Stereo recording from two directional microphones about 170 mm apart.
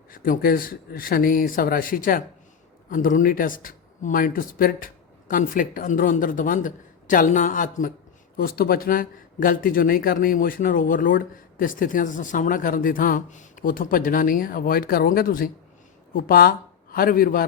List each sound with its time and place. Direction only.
0.1 s speech: 55° left (ahead or behind)